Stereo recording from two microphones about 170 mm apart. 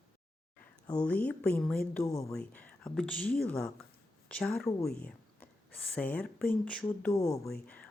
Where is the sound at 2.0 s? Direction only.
20° left (ahead or behind).